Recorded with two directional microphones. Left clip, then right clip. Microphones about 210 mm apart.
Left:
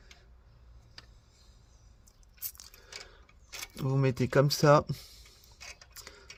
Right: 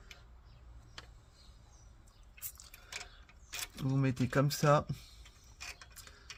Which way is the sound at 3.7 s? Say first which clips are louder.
Left 6 dB; 45° left (ahead or behind).